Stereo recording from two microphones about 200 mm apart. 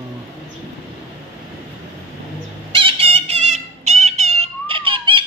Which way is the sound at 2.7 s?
25° right (ahead or behind).